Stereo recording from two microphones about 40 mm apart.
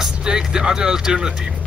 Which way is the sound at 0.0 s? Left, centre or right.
Centre.